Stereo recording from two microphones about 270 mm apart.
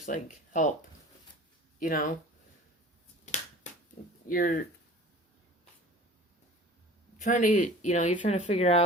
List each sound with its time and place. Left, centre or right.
0.0 s speech: left
1.8 s speech: left
3.3 s finger snapping: left
3.6 s a sound: left
4.3 s speech: left
7.2 s speech: left